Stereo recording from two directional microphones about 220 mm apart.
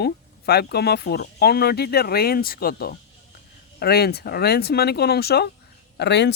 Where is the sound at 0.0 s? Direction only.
45° left (ahead or behind).